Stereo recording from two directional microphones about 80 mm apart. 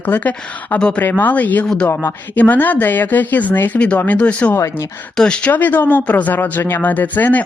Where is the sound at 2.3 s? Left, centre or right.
Left.